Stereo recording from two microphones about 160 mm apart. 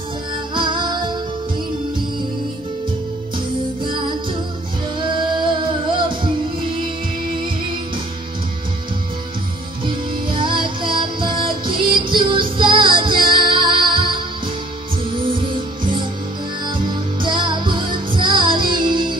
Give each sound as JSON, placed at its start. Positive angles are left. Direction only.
{"t": 0.6, "sound": "music", "side_deg": -30}
{"t": 3.8, "sound": "music", "side_deg": -30}
{"t": 9.8, "sound": "music", "side_deg": -30}
{"t": 15.2, "sound": "music", "side_deg": -30}
{"t": 17.2, "sound": "music", "side_deg": -30}